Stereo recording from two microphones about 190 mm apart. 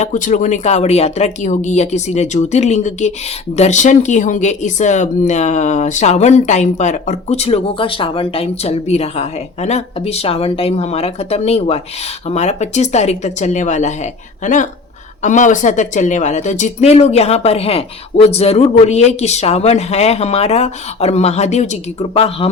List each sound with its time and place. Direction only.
0.0 s speech: 40° left (ahead or behind)